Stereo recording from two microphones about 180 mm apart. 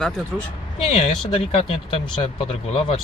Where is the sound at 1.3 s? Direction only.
35° left (ahead or behind).